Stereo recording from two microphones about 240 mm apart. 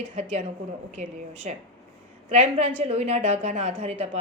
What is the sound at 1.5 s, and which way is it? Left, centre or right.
Speech, right.